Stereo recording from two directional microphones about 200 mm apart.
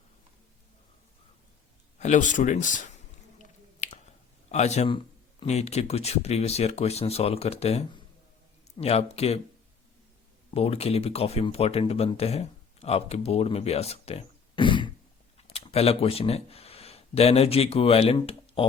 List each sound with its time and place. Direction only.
2.0 s speech: 40° left (ahead or behind)
3.3 s finger snapping: 35° left (ahead or behind)
4.5 s speech: 35° left (ahead or behind)
10.5 s speech: 30° left (ahead or behind)